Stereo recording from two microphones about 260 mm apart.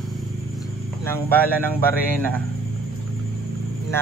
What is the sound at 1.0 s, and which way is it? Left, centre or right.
Speech, centre.